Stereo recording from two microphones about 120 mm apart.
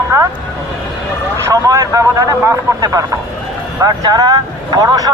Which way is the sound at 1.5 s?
25° right (ahead or behind).